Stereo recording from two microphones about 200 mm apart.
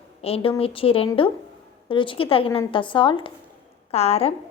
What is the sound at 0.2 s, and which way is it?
A woman's voice, 30° left (ahead or behind).